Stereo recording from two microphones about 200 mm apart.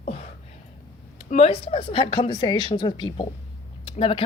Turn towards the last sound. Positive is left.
turn(degrees=30)  # may be behind; listen again after turning